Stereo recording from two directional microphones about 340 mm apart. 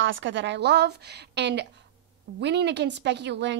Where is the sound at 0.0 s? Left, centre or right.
Right.